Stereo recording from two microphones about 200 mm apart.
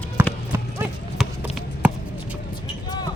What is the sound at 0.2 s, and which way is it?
Clip-clop, 10° right (ahead or behind).